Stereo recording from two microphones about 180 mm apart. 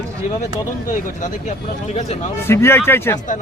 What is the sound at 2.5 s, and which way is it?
Speech, 15° left (ahead or behind).